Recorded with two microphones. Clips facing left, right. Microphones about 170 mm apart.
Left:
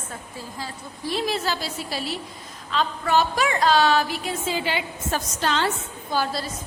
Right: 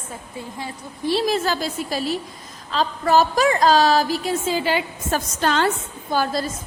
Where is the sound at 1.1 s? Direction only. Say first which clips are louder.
Right 4 dB; 45° right (ahead or behind).